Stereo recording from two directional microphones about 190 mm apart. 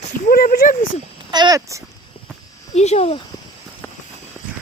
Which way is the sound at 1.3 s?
20° right (ahead or behind).